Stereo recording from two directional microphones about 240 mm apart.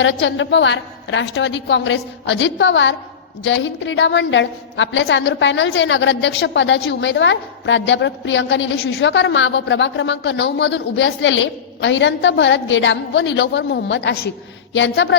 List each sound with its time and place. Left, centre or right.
0.0 s a woman's voice: left